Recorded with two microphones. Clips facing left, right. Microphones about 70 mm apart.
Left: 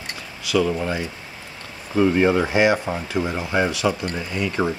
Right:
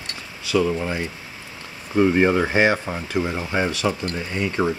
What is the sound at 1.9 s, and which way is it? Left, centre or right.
Speech, centre.